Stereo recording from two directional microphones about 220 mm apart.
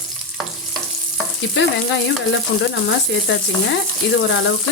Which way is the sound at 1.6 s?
55° left (ahead or behind).